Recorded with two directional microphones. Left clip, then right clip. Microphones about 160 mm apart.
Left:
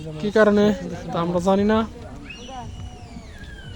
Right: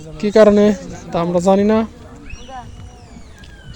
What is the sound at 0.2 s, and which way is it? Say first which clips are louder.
Speech: right 7 dB; 40° right (ahead or behind).